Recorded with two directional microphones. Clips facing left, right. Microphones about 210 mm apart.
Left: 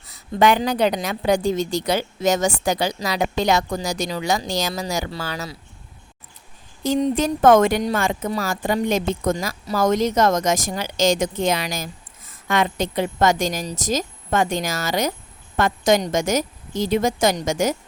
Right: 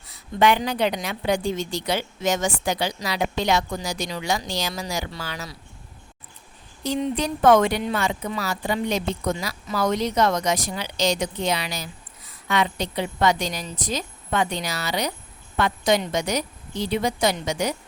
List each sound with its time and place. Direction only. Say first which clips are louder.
0.1 s a woman's voice: left 2 dB; 40° left (ahead or behind)
6.8 s speech: left 5 dB; 45° left (ahead or behind)